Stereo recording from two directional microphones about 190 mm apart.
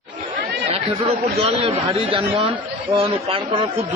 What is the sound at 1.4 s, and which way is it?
Speech, 30° right (ahead or behind).